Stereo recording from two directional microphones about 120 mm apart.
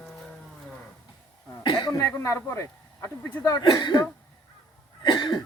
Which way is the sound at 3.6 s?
40° left (ahead or behind).